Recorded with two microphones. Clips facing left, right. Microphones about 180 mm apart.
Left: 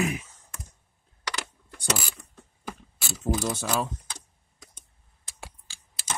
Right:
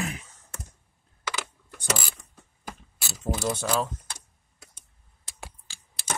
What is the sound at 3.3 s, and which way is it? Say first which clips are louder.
Speech: right 3 dB; 5° right (ahead or behind).